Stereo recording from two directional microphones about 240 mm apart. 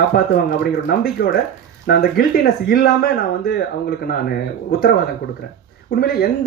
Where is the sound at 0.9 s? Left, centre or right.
Left.